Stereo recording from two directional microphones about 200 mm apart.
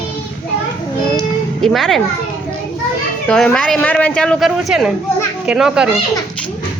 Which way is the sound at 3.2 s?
5° left (ahead or behind).